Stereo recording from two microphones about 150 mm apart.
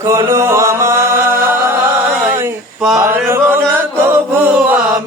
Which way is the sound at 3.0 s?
15° right (ahead or behind).